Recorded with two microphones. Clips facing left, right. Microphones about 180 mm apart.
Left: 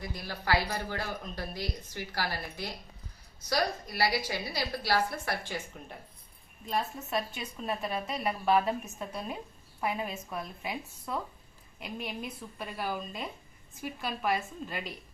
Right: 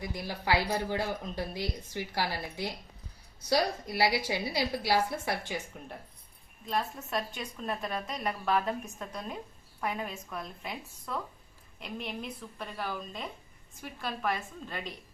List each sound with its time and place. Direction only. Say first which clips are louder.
0.1 s speech: even; 20° right (ahead or behind)
6.7 s a woman's voice: even; 5° left (ahead or behind)